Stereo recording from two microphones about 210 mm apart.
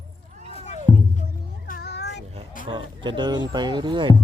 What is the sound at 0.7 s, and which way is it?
Music, 35° left (ahead or behind).